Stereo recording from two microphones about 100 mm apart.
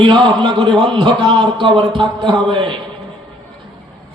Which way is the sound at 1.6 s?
55° right (ahead or behind).